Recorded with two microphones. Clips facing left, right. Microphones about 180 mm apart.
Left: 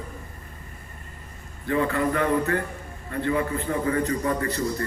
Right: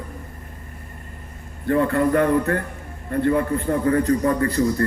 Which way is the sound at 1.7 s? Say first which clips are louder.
Right 5 dB; 50° right (ahead or behind).